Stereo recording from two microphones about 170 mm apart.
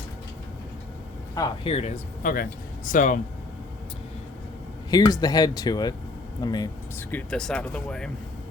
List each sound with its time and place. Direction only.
1.6 s speech: 35° left (ahead or behind)
2.2 s a man's voice: 55° left (ahead or behind)
4.9 s speech: 20° left (ahead or behind)
7.1 s speech: 10° left (ahead or behind)